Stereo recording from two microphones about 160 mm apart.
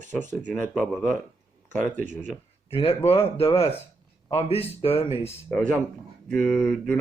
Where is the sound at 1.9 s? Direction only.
50° right (ahead or behind).